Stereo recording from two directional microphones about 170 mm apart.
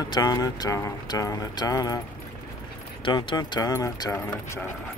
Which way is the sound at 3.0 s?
25° left (ahead or behind).